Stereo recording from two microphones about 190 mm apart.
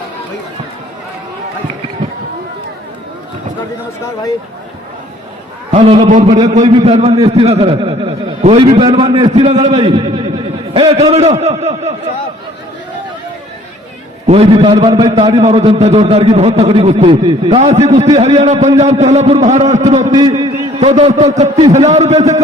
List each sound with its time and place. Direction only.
5.7 s a man's voice: 35° right (ahead or behind)
14.3 s a man's voice: 30° right (ahead or behind)
20.1 s a man's voice: 20° right (ahead or behind)
20.4 s a sound: 20° right (ahead or behind)
20.9 s a man's voice: 35° right (ahead or behind)